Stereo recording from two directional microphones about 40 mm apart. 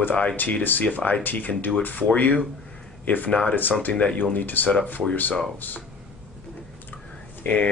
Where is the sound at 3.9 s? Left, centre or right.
Left.